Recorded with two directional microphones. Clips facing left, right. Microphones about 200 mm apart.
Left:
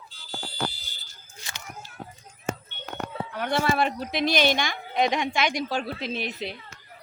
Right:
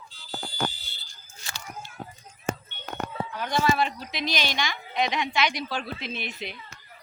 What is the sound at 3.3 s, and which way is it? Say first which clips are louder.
A woman's voice: even; 60° left (ahead or behind).